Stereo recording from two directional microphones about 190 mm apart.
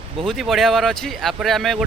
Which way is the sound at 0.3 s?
Centre (ahead or behind).